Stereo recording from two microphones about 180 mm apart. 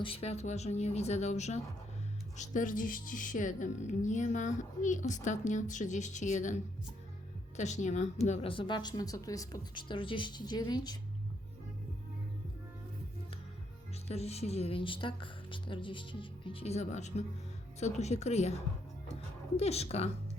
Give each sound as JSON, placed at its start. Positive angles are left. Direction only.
{"t": 0.0, "sound": "a woman's voice", "side_deg": 30}
{"t": 14.1, "sound": "speech", "side_deg": 35}
{"t": 19.5, "sound": "speech", "side_deg": 35}